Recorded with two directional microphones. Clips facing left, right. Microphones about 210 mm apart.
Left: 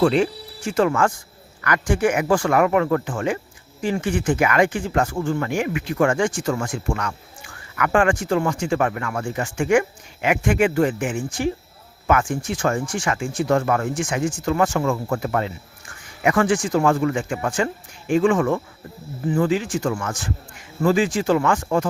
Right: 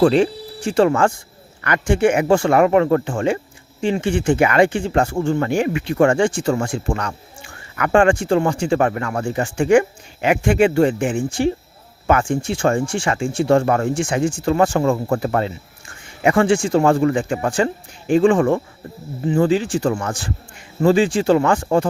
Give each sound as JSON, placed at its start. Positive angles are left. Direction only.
{"t": 0.0, "sound": "speech", "side_deg": -30}